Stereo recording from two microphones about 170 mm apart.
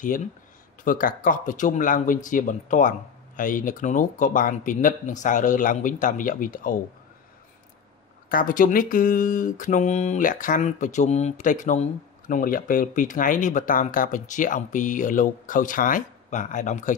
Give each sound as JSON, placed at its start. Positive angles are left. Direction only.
{"t": 0.8, "sound": "speech", "side_deg": 55}
{"t": 8.3, "sound": "speech", "side_deg": 55}